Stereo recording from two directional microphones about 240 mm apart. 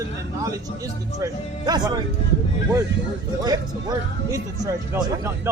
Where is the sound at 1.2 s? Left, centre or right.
Centre.